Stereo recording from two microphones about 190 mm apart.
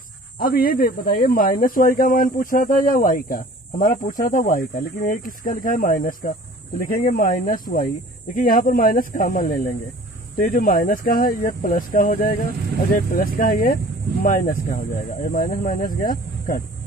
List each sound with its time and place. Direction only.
0.4 s speech: 50° left (ahead or behind)